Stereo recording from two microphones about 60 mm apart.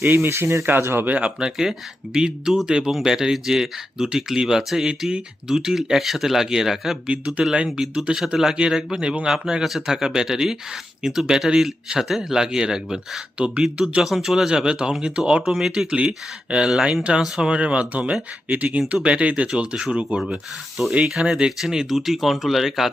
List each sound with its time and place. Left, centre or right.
0.0 s speech: right
0.6 s speech: right
1.0 s speech: right
1.4 s speech: centre
16.7 s speech: centre
17.0 s speech: centre
17.5 s speech: centre
19.5 s speech: centre
21.1 s speech: centre